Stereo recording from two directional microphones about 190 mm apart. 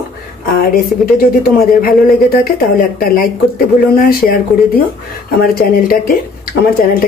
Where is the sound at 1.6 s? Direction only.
50° left (ahead or behind).